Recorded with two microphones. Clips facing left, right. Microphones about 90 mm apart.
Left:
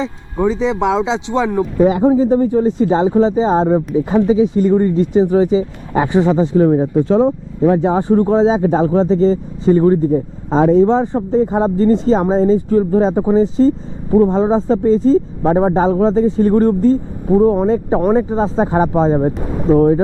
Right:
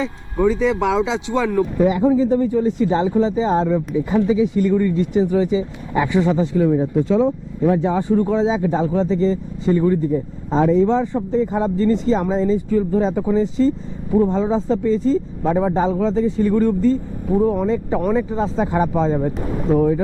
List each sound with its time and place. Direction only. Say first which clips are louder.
0.0 s speech: left 1 dB; 20° left (ahead or behind); by 16.9 s 40° left (ahead or behind)
17.2 s speech: left 6 dB; 30° left (ahead or behind)